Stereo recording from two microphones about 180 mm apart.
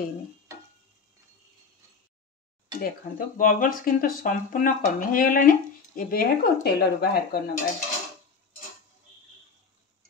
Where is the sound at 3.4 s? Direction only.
50° left (ahead or behind).